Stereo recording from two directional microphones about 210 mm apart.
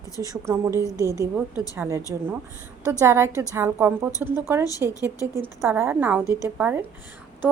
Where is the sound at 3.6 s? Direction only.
10° right (ahead or behind).